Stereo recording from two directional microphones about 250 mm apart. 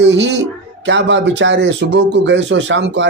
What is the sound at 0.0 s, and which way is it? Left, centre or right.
Speech, right.